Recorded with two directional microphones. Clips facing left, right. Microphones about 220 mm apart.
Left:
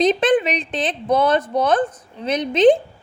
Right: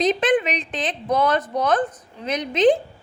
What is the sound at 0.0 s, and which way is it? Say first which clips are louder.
A woman's voice: left 3 dB; 30° left (ahead or behind).